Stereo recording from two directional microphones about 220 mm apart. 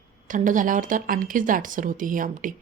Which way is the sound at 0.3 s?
35° right (ahead or behind).